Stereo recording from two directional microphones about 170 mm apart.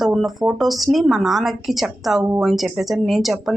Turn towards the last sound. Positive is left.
turn(degrees=0)  # may be behind; listen again after turning